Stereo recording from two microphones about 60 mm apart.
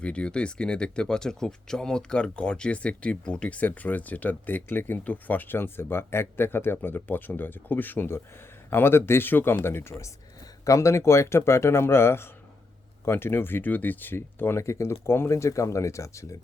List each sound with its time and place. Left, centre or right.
0.0 s speech: centre; by 10.0 s left
10.7 s speech: left